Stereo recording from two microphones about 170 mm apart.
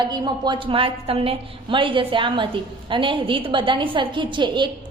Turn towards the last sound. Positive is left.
turn(degrees=-30)  # may be behind; listen again after turning